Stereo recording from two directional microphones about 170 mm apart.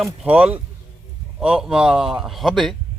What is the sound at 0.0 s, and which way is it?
A man's voice, 5° right (ahead or behind).